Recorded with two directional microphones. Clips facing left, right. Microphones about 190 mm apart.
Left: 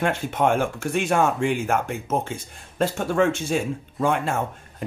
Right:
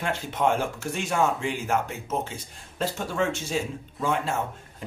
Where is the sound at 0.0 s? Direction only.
55° left (ahead or behind).